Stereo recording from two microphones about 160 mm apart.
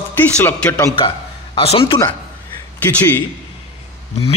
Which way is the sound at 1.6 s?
35° left (ahead or behind).